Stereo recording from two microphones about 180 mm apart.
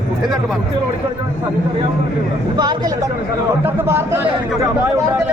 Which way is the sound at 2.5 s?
25° right (ahead or behind).